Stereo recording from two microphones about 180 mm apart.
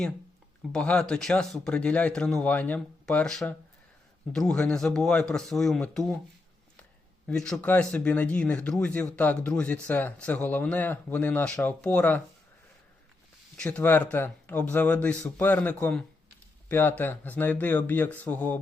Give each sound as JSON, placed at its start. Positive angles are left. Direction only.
{"t": 0.7, "sound": "speech", "side_deg": 5}
{"t": 7.3, "sound": "speech", "side_deg": 5}
{"t": 13.6, "sound": "speech", "side_deg": 10}